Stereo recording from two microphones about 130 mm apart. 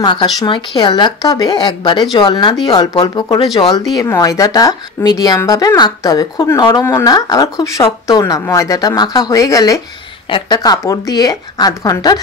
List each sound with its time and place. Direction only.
0.0 s a woman's voice: 35° left (ahead or behind)